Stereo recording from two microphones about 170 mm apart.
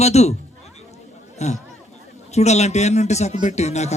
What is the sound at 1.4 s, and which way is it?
Speech, 40° left (ahead or behind).